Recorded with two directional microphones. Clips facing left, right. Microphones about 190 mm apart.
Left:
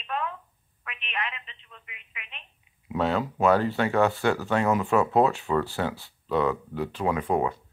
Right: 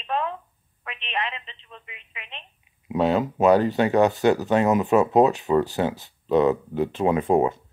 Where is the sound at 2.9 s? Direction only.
15° right (ahead or behind).